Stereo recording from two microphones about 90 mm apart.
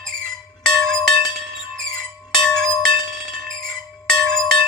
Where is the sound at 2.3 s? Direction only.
5° left (ahead or behind).